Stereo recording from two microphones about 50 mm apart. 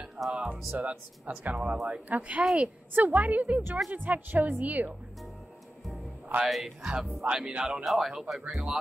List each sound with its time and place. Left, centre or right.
0.2 s speech: right
0.7 s speech: right
2.4 s speech: centre
2.9 s speech: right
6.4 s speech: centre
7.2 s speech: centre
7.8 s speech: centre